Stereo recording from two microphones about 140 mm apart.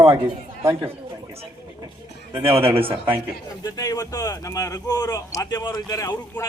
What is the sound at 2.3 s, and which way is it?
Speech, 20° right (ahead or behind).